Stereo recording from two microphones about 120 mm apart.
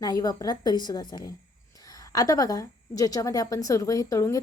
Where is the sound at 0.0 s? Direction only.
30° left (ahead or behind).